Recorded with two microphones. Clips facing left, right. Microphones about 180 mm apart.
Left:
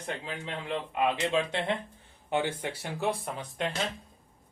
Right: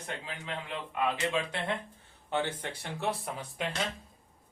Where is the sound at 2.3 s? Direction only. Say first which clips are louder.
Left 3 dB; 10° left (ahead or behind).